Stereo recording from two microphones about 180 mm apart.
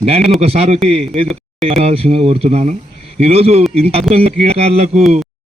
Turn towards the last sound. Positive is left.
turn(degrees=-35)  # may be behind; listen again after turning